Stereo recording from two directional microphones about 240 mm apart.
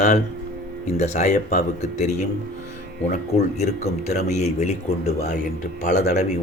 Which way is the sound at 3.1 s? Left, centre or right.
Left.